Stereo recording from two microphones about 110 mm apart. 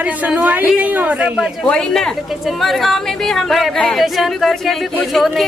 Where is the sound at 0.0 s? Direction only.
15° right (ahead or behind).